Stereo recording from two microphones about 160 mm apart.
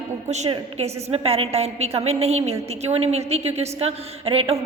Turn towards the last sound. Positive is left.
turn(degrees=-40)  # may be behind; listen again after turning